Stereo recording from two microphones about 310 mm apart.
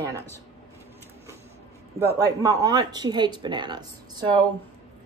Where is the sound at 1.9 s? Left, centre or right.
Centre.